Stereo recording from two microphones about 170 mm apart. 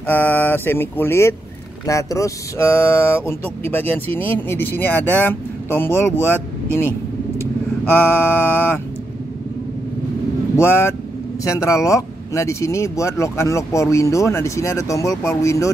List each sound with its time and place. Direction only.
0.0 s speech: 10° left (ahead or behind)
7.3 s speech: 10° left (ahead or behind)
10.5 s speech: 15° left (ahead or behind)